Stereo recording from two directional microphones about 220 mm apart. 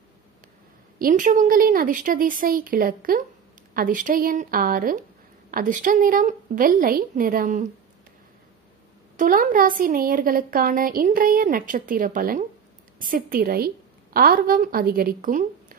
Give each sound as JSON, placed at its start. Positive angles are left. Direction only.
{"t": 0.9, "sound": "a woman's voice", "side_deg": -40}
{"t": 9.1, "sound": "a woman's voice", "side_deg": -35}